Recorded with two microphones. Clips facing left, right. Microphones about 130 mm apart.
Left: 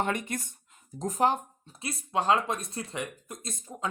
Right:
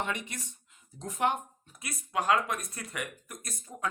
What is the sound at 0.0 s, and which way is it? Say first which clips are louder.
Speech: left 5 dB; 45° left (ahead or behind).